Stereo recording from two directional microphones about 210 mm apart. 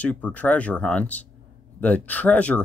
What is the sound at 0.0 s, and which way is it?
Speech, 5° left (ahead or behind).